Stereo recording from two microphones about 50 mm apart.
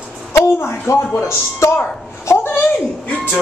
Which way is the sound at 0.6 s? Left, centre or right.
Left.